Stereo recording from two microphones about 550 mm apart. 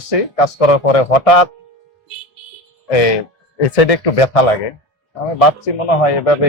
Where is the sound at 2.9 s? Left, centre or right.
Left.